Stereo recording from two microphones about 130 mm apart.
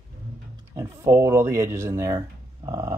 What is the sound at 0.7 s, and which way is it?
Speech, 25° right (ahead or behind).